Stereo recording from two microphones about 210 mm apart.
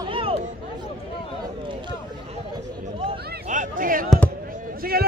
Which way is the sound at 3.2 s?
45° right (ahead or behind).